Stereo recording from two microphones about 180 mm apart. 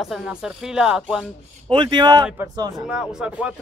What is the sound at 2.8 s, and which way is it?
Speech, 5° right (ahead or behind).